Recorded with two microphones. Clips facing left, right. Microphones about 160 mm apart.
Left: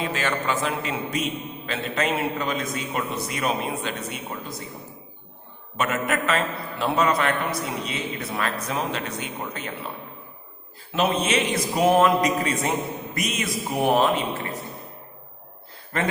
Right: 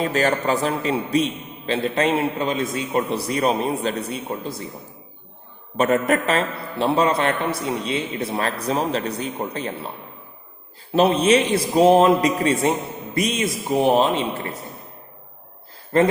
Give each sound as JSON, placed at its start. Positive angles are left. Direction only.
{"t": 0.0, "sound": "a man's voice", "side_deg": -40}
{"t": 5.7, "sound": "a man's voice", "side_deg": -35}
{"t": 10.9, "sound": "a man's voice", "side_deg": -35}
{"t": 15.9, "sound": "speech", "side_deg": -30}